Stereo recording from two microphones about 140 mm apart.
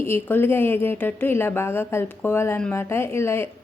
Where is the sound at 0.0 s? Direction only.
15° left (ahead or behind).